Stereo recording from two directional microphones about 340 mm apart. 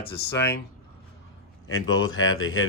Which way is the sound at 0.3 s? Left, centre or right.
Left.